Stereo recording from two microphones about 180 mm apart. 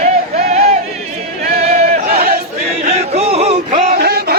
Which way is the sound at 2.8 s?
35° right (ahead or behind).